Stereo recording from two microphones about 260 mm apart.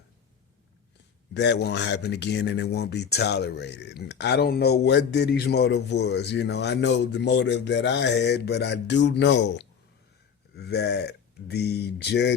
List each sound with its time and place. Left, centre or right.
1.3 s speech: left